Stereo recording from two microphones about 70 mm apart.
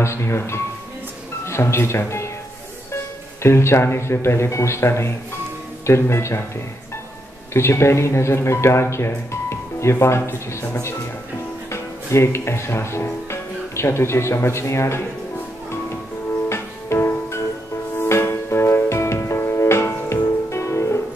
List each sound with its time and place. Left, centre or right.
0.0 s speech: left
3.4 s speech: left
7.5 s speech: left
16.4 s music: left